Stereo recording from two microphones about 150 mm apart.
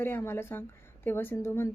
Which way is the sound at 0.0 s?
15° left (ahead or behind).